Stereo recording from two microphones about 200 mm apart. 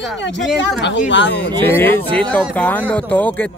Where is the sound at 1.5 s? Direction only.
10° left (ahead or behind).